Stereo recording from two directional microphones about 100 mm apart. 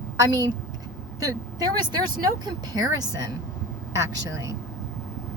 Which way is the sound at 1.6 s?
40° right (ahead or behind).